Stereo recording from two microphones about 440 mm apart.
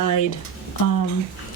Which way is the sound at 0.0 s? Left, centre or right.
Left.